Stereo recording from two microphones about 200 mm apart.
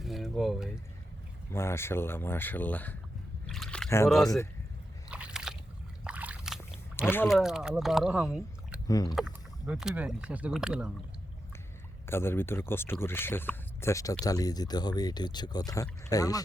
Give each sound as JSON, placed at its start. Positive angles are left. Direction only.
{"t": 0.0, "sound": "a sound", "side_deg": 0}
{"t": 1.5, "sound": "speech", "side_deg": 15}
{"t": 3.5, "sound": "a sound", "side_deg": 0}
{"t": 3.8, "sound": "speech", "side_deg": 15}
{"t": 5.0, "sound": "biting", "side_deg": -5}
{"t": 6.1, "sound": "boat", "side_deg": -5}
{"t": 7.3, "sound": "speech", "side_deg": 0}
{"t": 8.9, "sound": "speech", "side_deg": 20}
{"t": 9.1, "sound": "speech", "side_deg": -5}
{"t": 12.0, "sound": "speech", "side_deg": 10}